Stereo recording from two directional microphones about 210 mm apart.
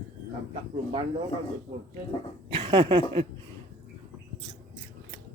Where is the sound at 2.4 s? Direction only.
25° right (ahead or behind).